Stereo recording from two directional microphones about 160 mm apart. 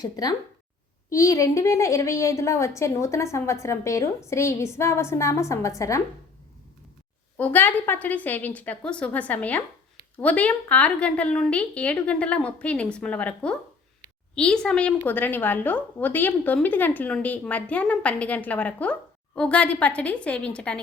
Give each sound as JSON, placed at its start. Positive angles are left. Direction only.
{"t": 0.0, "sound": "a woman's voice", "side_deg": 25}
{"t": 7.3, "sound": "a woman's voice", "side_deg": 10}